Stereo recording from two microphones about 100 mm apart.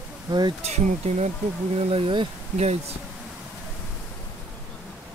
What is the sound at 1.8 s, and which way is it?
Speech, 70° right (ahead or behind).